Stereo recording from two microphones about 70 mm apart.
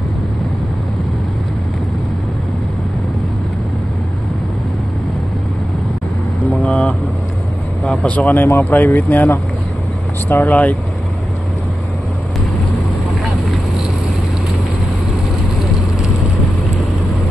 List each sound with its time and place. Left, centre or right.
6.5 s vehicle: centre
7.8 s speech: centre; by 10.5 s left
10.5 s speech: left